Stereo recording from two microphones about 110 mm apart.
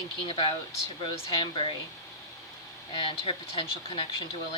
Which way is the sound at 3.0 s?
50° left (ahead or behind).